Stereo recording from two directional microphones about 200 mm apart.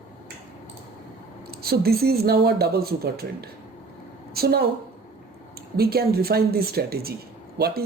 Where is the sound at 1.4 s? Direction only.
50° right (ahead or behind).